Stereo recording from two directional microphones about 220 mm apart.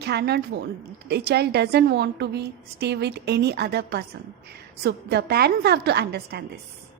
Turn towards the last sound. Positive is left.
turn(degrees=-45)  # may be behind; listen again after turning